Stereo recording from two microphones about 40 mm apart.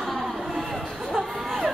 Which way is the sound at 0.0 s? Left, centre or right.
Centre.